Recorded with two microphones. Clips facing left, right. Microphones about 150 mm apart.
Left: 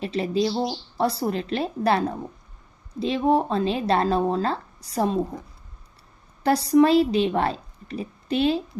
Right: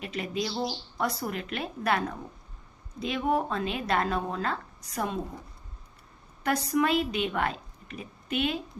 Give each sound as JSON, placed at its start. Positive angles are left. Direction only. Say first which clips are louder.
{"t": 0.0, "sound": "speech", "louder": "left 9 dB", "side_deg": 30}
{"t": 6.4, "sound": "a woman's voice", "louder": "left 9 dB", "side_deg": 35}